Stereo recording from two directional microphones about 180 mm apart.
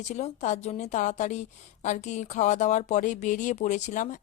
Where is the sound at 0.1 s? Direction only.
40° left (ahead or behind).